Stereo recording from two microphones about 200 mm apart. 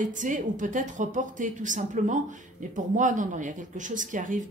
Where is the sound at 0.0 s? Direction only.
40° right (ahead or behind).